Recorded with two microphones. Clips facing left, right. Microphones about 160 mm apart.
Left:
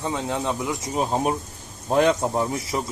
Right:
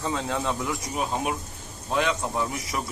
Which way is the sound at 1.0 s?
35° left (ahead or behind).